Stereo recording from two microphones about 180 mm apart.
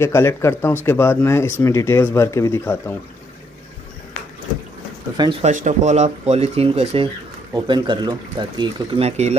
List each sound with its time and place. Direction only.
0.0 s speech: 15° left (ahead or behind)
5.1 s speech: 25° right (ahead or behind)
5.4 s speech: 45° right (ahead or behind)